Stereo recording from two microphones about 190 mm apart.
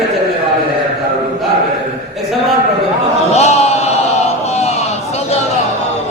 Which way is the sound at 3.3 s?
35° left (ahead or behind).